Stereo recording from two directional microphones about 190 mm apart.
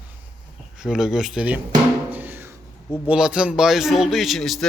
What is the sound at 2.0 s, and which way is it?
Drum, 10° right (ahead or behind).